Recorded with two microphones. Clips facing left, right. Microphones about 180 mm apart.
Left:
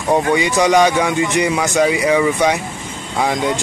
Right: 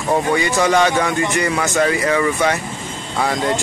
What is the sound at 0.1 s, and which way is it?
Speech, 15° left (ahead or behind).